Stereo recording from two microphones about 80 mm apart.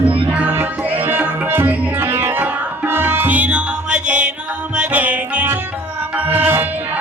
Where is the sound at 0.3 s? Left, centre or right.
Centre.